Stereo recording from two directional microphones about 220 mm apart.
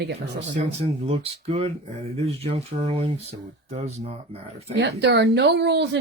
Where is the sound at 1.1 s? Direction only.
25° right (ahead or behind).